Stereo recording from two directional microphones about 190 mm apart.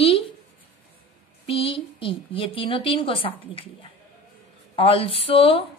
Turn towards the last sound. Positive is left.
turn(degrees=30)  # may be behind; listen again after turning